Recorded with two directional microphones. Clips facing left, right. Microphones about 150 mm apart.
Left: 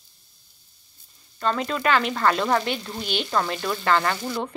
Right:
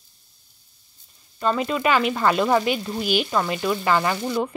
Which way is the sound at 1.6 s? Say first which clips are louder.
Right 1 dB; 10° right (ahead or behind).